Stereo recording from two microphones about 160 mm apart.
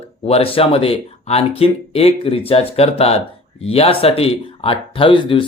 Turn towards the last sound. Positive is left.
turn(degrees=30)  # may be behind; listen again after turning